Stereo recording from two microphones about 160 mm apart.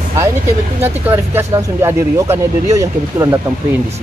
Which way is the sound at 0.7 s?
15° right (ahead or behind).